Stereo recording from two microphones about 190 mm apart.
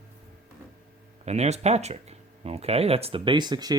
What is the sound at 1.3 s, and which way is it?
Speech, 35° right (ahead or behind).